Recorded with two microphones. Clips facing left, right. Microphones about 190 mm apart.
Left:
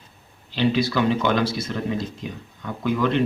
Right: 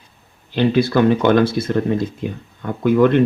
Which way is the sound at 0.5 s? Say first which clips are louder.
Right 6 dB; 55° right (ahead or behind).